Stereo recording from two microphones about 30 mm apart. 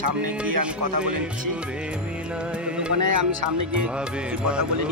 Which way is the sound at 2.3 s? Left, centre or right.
Right.